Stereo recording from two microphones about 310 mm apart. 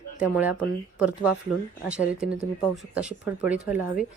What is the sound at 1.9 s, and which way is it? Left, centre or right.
A woman's voice, centre.